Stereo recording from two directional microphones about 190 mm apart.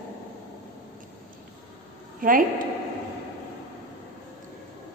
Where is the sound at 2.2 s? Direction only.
45° right (ahead or behind).